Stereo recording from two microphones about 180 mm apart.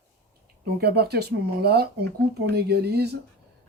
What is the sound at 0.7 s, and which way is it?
Speech, 60° right (ahead or behind).